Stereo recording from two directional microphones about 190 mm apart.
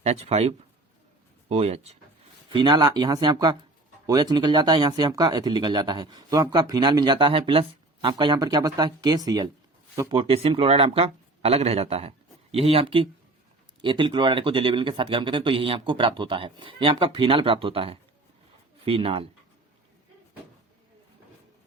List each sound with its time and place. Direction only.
0.0 s speech: 35° right (ahead or behind)
2.5 s speech: 25° right (ahead or behind)